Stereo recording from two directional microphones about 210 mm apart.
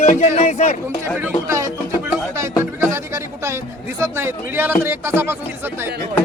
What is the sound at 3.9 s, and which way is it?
Speech, 10° right (ahead or behind).